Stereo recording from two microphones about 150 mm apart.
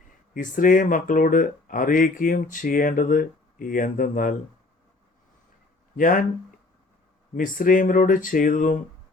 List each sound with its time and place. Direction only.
0.3 s speech: 60° left (ahead or behind)
6.0 s speech: 60° left (ahead or behind)
7.3 s speech: 65° left (ahead or behind)